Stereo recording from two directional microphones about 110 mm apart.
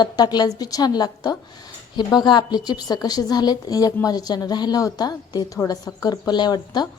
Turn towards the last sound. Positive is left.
turn(degrees=40)  # may be behind; listen again after turning